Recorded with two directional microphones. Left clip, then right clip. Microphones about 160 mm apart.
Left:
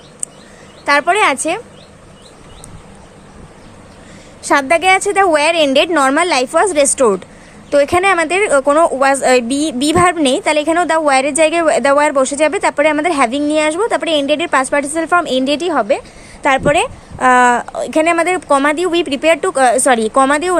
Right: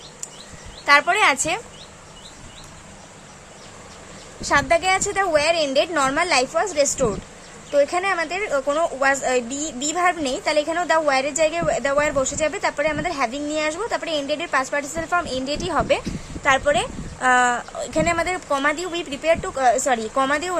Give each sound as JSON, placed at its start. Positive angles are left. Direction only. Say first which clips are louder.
{"t": 0.9, "sound": "a woman's voice", "louder": "left 4 dB", "side_deg": 25}
{"t": 4.4, "sound": "a woman's voice", "louder": "left 7 dB", "side_deg": 20}
{"t": 16.4, "sound": "a woman's voice", "louder": "left 6 dB", "side_deg": 25}